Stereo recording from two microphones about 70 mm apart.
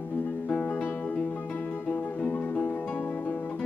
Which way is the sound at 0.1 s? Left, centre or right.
Left.